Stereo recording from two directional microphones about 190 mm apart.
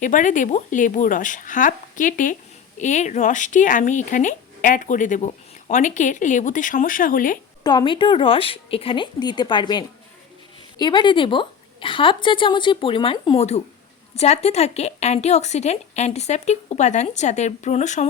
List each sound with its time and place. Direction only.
0.0 s speech: 40° left (ahead or behind)
7.6 s a woman's voice: 20° left (ahead or behind); by 18.0 s 40° left (ahead or behind)